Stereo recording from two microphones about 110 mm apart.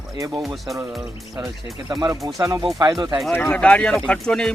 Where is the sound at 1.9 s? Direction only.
35° right (ahead or behind).